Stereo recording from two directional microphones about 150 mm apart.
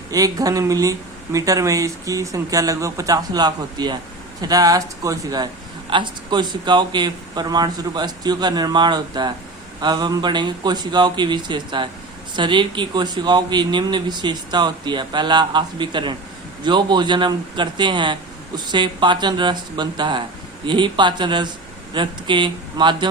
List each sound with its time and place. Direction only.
0.1 s speech: 25° right (ahead or behind)